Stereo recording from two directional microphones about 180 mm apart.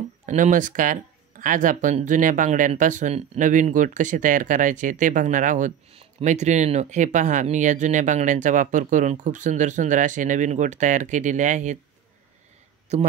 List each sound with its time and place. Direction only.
0.3 s speech: 45° right (ahead or behind)
12.9 s speech: 40° right (ahead or behind)